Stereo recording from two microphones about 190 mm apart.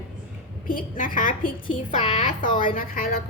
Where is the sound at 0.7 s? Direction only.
45° left (ahead or behind).